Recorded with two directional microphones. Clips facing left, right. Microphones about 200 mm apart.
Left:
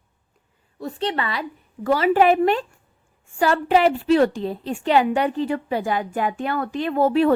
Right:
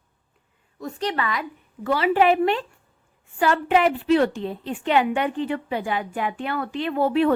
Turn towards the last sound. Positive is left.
turn(degrees=40)  # may be behind; listen again after turning